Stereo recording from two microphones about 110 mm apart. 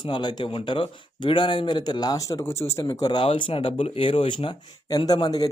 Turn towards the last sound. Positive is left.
turn(degrees=35)  # may be behind; listen again after turning